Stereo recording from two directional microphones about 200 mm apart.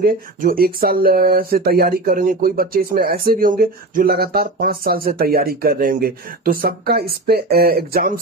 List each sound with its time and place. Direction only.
0.0 s speech: 45° right (ahead or behind)